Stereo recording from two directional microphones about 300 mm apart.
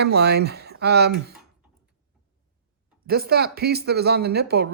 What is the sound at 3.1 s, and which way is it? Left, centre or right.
Speech, right.